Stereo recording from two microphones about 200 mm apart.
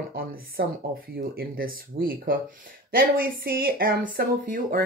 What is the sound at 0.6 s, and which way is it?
Speech, 55° right (ahead or behind).